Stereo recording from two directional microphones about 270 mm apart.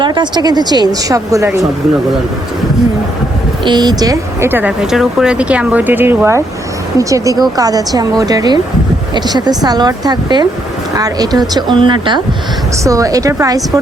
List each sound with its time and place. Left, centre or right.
0.0 s speech: centre
3.6 s speech: centre